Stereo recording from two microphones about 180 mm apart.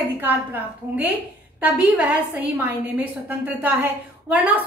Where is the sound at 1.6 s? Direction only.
10° right (ahead or behind).